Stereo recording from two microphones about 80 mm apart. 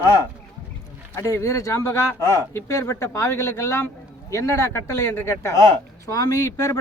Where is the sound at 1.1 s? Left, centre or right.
Left.